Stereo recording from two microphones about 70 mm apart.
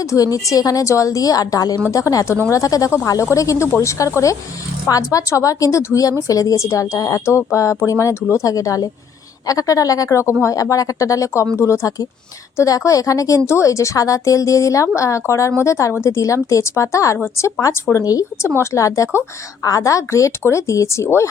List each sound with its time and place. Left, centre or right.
0.0 s a woman's voice: left
18.0 s a woman's voice: left
18.5 s a woman's voice: left